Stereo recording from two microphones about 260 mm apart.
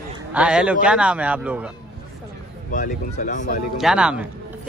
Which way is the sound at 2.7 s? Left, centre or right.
Left.